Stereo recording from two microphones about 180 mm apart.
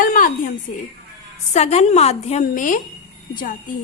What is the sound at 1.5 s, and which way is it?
A woman's voice, 40° left (ahead or behind).